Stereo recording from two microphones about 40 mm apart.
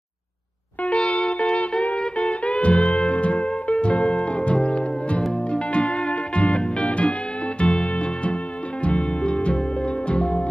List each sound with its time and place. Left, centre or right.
0.8 s music: left